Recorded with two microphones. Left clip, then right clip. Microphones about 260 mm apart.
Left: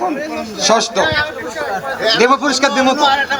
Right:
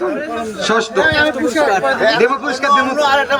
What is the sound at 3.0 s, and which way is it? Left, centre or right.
Speech, centre.